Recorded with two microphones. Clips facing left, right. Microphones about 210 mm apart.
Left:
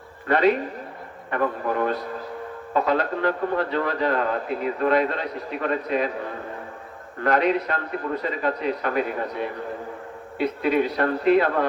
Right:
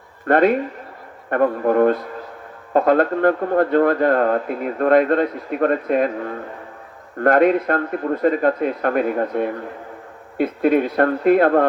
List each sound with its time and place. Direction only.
0.3 s speech: 50° right (ahead or behind)
7.2 s speech: 50° right (ahead or behind)